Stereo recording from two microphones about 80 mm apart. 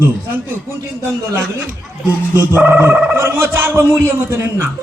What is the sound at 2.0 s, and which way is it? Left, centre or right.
Speech, right.